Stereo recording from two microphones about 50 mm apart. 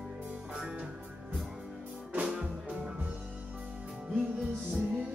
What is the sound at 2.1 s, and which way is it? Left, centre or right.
Music, right.